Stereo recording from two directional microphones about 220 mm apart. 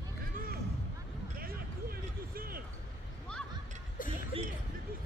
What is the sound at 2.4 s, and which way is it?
Basketball bounce, 40° right (ahead or behind).